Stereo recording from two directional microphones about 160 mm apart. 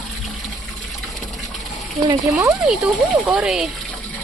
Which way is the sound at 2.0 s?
20° right (ahead or behind).